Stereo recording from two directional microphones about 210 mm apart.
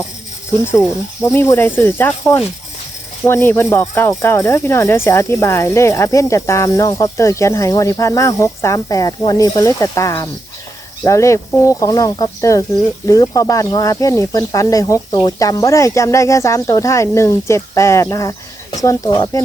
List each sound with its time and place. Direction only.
1.2 s speech: 10° left (ahead or behind)